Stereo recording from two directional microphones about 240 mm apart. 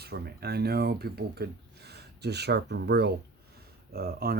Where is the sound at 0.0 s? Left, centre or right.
Right.